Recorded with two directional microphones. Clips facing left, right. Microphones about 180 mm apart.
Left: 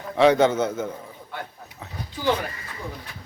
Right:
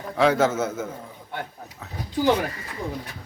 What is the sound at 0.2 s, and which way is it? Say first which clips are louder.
Speech: left 3 dB; 5° right (ahead or behind).